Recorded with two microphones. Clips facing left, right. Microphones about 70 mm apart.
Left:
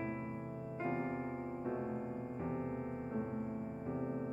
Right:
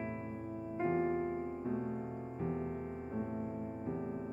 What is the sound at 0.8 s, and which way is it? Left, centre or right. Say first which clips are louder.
Keyboard: right 6 dB; centre.